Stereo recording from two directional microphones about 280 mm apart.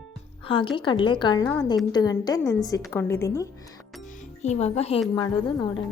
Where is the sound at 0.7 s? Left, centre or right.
Centre.